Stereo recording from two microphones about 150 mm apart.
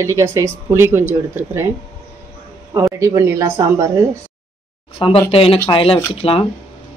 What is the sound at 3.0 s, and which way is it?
Speech, 20° right (ahead or behind).